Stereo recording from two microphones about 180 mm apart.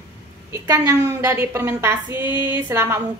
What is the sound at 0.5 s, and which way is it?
A woman's voice, 15° right (ahead or behind).